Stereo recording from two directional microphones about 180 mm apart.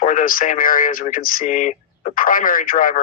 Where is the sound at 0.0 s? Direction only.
50° left (ahead or behind).